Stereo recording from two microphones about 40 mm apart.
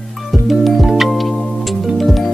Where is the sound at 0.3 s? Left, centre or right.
Centre.